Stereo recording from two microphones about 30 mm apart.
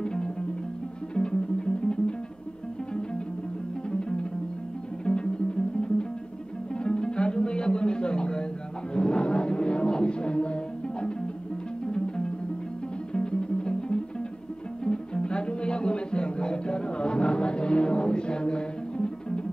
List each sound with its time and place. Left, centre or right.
0.0 s music: left
3.9 s music: left